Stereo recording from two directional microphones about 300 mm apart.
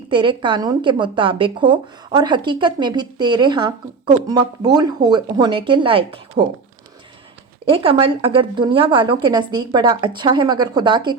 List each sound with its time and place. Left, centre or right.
0.1 s speech: centre
7.6 s speech: centre